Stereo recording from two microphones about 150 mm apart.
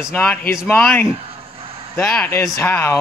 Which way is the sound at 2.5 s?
15° left (ahead or behind).